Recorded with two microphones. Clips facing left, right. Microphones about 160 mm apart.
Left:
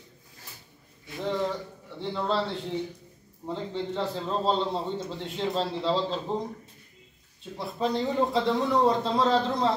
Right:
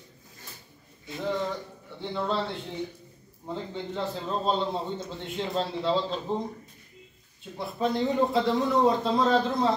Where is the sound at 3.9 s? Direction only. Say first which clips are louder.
Even; centre (ahead or behind).